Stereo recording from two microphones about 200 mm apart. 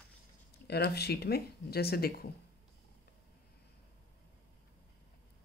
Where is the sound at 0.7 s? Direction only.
55° left (ahead or behind).